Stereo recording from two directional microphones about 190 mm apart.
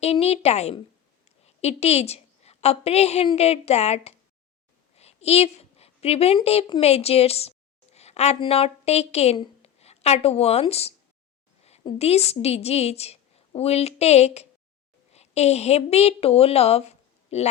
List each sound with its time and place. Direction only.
0.0 s a woman's voice: 35° left (ahead or behind)